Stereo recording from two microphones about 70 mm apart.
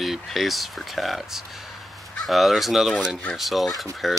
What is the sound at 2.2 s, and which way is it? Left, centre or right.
Speech, centre.